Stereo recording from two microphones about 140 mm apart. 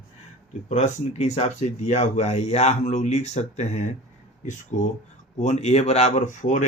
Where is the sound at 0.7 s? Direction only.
55° left (ahead or behind).